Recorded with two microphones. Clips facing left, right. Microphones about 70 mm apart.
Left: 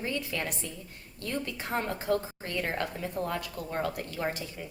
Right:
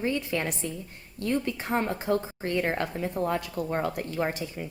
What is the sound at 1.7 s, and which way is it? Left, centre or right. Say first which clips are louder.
A woman's voice: right 2 dB; right.